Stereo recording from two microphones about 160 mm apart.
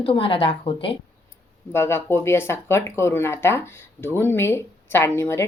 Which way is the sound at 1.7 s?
15° left (ahead or behind).